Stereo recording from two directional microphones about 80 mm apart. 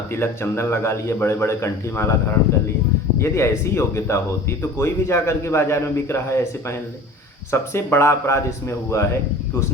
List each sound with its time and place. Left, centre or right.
0.1 s speech: left